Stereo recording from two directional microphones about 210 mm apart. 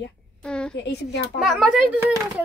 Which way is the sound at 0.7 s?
55° left (ahead or behind).